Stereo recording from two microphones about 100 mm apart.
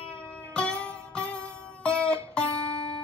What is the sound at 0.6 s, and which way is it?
Music, 10° left (ahead or behind).